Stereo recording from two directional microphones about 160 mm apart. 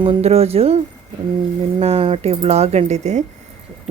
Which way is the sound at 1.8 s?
40° right (ahead or behind).